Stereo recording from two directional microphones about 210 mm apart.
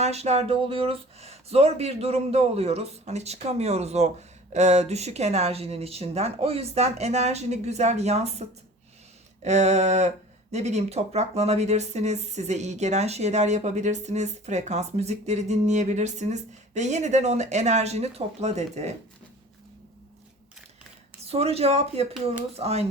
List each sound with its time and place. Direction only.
0.0 s speech: 30° right (ahead or behind)
21.2 s speech: 30° right (ahead or behind)